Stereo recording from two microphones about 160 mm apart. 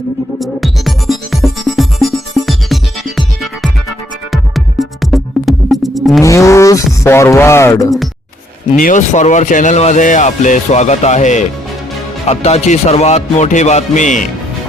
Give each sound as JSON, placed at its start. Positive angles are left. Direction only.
{"t": 0.3, "sound": "music", "side_deg": 0}
{"t": 6.2, "sound": "a sound", "side_deg": 20}
{"t": 7.0, "sound": "speech", "side_deg": 15}
{"t": 8.7, "sound": "speech", "side_deg": 55}